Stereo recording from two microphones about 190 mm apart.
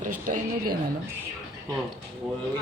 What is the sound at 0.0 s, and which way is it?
Speech, 45° right (ahead or behind).